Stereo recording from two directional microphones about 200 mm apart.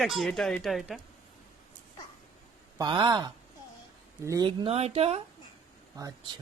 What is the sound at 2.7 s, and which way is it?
Speech, 20° right (ahead or behind).